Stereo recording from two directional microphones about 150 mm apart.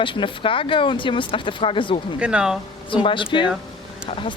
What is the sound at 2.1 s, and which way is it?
Speech, 5° right (ahead or behind).